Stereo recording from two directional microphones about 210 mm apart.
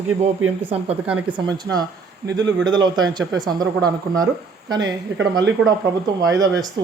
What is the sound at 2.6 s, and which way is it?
Speech, 20° right (ahead or behind).